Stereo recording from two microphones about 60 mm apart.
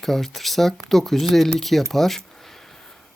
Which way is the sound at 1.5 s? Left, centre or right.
Centre.